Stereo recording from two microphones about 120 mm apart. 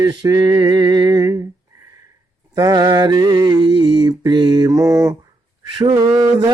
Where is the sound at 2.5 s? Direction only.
30° right (ahead or behind).